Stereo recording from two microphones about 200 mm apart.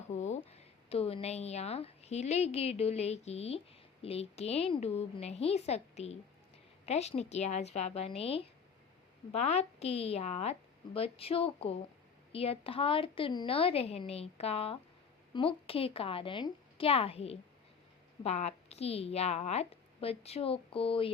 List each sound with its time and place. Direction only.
0.1 s a woman's voice: 35° left (ahead or behind)